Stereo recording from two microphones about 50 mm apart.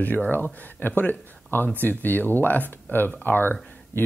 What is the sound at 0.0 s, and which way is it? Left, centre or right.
Speech, left.